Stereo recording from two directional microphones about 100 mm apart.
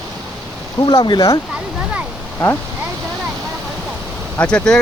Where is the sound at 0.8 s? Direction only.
50° left (ahead or behind).